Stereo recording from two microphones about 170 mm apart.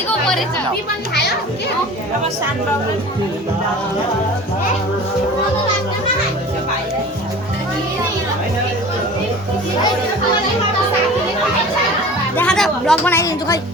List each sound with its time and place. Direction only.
12.4 s a woman's voice: 5° left (ahead or behind)
13.1 s speech: 20° left (ahead or behind)